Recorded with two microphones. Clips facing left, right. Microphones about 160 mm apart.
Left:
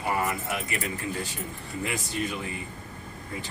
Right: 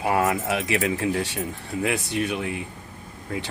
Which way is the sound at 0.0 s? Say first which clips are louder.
Right 6 dB; 90° right.